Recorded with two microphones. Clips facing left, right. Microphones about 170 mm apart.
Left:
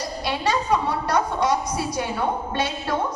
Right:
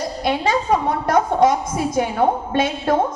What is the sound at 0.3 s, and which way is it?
A woman's voice, 50° right (ahead or behind).